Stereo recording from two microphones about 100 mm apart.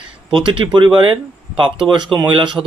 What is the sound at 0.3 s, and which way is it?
Speech, 55° right (ahead or behind).